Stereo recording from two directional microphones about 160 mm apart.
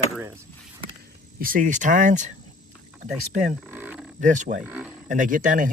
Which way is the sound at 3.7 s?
10° right (ahead or behind).